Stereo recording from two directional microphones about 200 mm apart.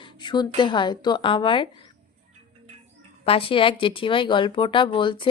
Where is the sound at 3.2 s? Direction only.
30° left (ahead or behind).